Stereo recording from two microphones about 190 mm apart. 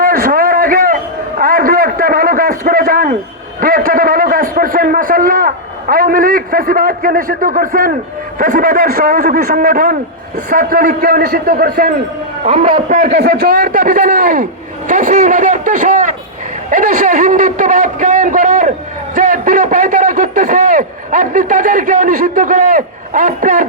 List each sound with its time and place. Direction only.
0.0 s a sound: 50° right (ahead or behind)
3.6 s a man's voice: 50° right (ahead or behind)
12.5 s a man's voice: 40° right (ahead or behind)
13.1 s a man's voice: 65° right (ahead or behind); by 14.4 s 45° right (ahead or behind)
14.8 s a sound: 45° right (ahead or behind)
16.6 s a man's voice: 45° right (ahead or behind)